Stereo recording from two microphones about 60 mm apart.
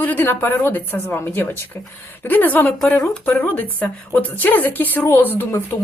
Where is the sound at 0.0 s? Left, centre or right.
Left.